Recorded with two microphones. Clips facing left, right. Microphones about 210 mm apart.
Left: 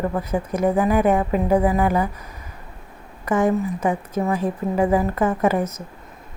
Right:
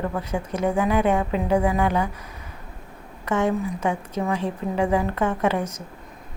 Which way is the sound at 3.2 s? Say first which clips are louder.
Left 3 dB; 10° left (ahead or behind).